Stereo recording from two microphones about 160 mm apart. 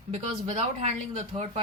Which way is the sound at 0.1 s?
40° right (ahead or behind).